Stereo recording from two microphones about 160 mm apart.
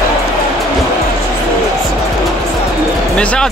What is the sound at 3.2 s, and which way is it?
Speech, 5° left (ahead or behind).